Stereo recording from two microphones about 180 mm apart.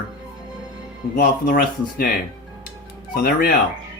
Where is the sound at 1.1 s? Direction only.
50° left (ahead or behind).